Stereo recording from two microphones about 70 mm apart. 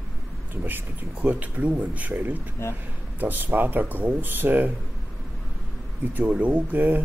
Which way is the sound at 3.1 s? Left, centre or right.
Right.